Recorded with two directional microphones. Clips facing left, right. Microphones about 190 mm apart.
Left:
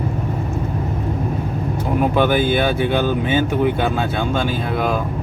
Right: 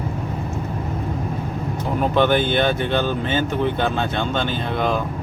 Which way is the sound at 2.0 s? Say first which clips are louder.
Left 1 dB; 10° left (ahead or behind).